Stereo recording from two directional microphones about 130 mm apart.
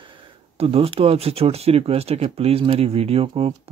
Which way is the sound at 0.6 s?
45° right (ahead or behind).